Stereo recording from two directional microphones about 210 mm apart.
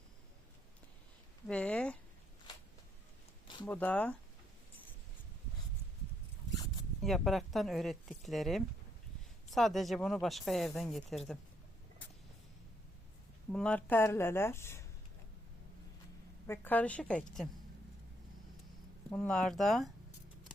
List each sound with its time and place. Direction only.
1.5 s speech: 5° left (ahead or behind)
3.4 s a sound: 20° left (ahead or behind)
3.7 s speech: 5° left (ahead or behind)
7.0 s speech: centre (ahead or behind)
13.5 s speech: 5° left (ahead or behind)
16.5 s speech: 10° left (ahead or behind)
19.1 s speech: 5° left (ahead or behind)